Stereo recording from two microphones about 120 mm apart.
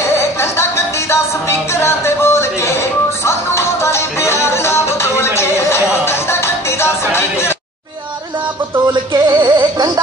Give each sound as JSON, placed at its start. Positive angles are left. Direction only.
{"t": 0.1, "sound": "music", "side_deg": 20}
{"t": 9.1, "sound": "music", "side_deg": -35}